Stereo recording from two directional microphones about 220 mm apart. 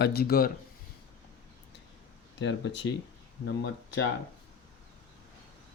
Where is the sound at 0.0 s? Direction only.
45° left (ahead or behind).